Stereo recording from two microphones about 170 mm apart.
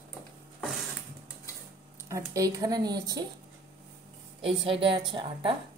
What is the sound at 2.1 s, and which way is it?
Speech, 20° right (ahead or behind).